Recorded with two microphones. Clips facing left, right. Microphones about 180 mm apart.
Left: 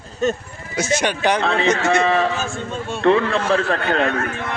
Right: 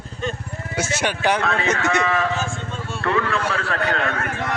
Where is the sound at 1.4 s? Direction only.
30° left (ahead or behind).